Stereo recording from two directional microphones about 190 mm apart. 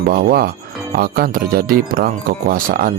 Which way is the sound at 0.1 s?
50° right (ahead or behind).